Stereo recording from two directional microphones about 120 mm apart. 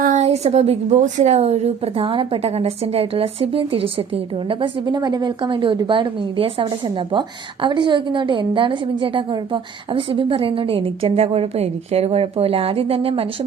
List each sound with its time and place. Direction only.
0.1 s a woman's voice: 65° right (ahead or behind)